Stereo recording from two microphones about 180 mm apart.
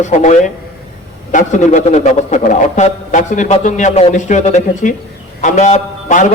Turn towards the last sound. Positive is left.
turn(degrees=40)  # may be behind; listen again after turning